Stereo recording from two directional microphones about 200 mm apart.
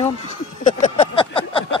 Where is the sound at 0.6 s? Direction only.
40° left (ahead or behind).